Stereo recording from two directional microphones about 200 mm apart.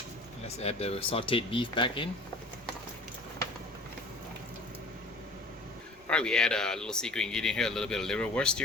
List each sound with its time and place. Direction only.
0.4 s speech: 30° left (ahead or behind)
6.1 s speech: 5° left (ahead or behind)